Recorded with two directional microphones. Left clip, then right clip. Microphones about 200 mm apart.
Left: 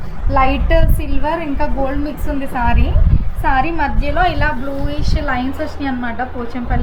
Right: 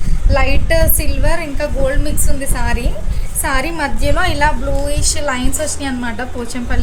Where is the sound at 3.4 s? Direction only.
80° right.